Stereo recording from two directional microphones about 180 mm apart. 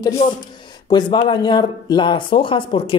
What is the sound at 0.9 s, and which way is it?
Speech, 25° left (ahead or behind).